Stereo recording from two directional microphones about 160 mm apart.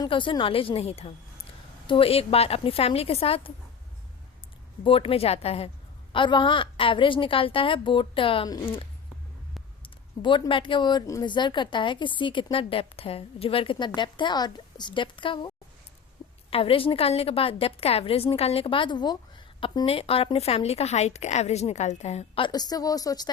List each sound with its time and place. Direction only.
0.0 s a woman's voice: 30° left (ahead or behind)
4.8 s a woman's voice: 35° left (ahead or behind)
9.8 s speech: 30° left (ahead or behind)
16.5 s a woman's voice: 35° left (ahead or behind)
22.4 s speech: 25° left (ahead or behind)